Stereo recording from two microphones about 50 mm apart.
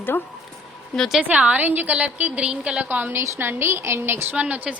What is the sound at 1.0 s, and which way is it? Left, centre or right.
Speech, centre.